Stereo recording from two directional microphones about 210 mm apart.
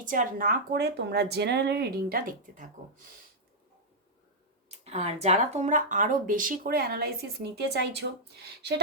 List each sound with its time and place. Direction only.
0.0 s speech: 40° right (ahead or behind)
4.8 s speech: 30° right (ahead or behind); by 8.7 s 50° right (ahead or behind)